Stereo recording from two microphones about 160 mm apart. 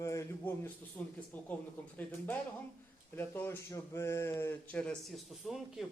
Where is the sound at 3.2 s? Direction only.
15° left (ahead or behind).